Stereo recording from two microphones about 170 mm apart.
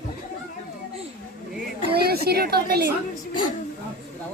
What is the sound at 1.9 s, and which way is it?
Speech, 65° right (ahead or behind).